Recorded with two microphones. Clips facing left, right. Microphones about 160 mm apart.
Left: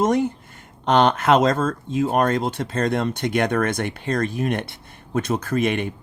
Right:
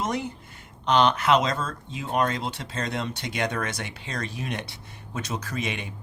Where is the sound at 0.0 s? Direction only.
50° left (ahead or behind).